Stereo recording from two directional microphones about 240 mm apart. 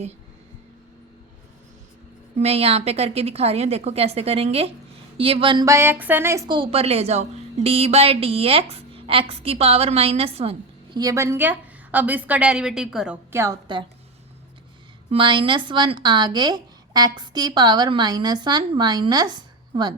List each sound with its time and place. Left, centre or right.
2.4 s a woman's voice: right
15.1 s a woman's voice: centre